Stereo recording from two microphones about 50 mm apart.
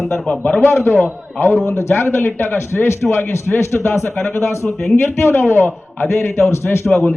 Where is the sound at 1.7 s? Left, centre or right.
Left.